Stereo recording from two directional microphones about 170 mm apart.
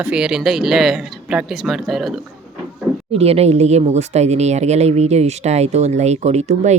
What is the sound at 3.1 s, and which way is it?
Speech, 35° right (ahead or behind).